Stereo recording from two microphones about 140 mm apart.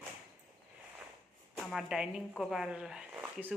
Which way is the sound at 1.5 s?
Centre (ahead or behind).